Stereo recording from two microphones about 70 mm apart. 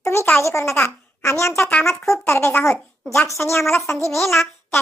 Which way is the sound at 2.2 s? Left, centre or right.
Left.